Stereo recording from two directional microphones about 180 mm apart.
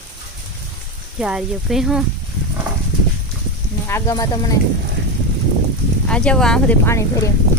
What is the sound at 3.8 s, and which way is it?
Speech, 15° left (ahead or behind).